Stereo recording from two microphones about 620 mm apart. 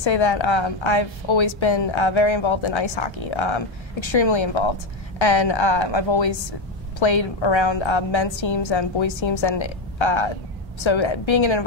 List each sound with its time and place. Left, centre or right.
0.0 s a woman's voice: left